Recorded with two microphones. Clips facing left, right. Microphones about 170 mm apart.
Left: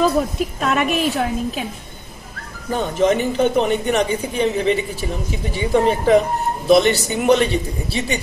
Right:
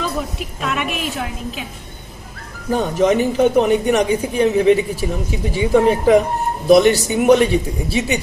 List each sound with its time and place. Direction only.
0.0 s a woman's voice: 40° left (ahead or behind)
2.7 s speech: 5° right (ahead or behind)